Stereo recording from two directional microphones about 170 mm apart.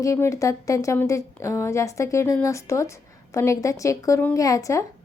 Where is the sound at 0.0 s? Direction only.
15° left (ahead or behind).